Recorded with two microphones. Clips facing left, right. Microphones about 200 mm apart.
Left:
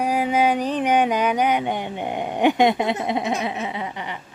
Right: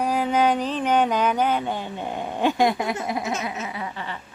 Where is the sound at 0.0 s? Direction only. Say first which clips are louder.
Left 1 dB; 10° left (ahead or behind).